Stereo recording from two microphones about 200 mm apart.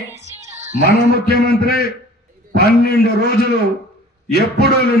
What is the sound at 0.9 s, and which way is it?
A man's voice, 50° left (ahead or behind).